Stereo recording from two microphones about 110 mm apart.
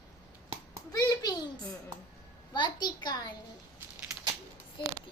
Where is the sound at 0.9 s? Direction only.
35° left (ahead or behind).